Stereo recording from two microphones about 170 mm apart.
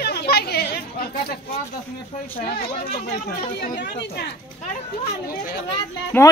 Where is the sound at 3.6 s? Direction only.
80° left.